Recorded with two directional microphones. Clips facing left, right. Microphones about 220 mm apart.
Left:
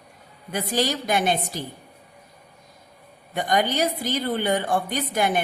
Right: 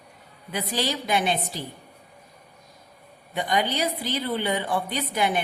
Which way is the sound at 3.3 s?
45° left (ahead or behind).